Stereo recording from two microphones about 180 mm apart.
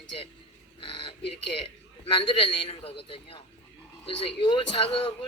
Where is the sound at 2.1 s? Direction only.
25° left (ahead or behind).